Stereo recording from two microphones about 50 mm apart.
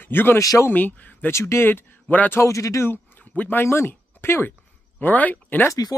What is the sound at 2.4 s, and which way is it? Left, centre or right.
Speech, left.